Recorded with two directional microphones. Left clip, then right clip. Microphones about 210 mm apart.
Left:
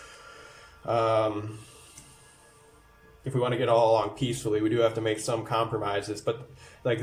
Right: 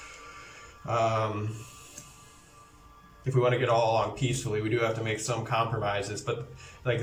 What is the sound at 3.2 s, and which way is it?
Speech, 20° left (ahead or behind).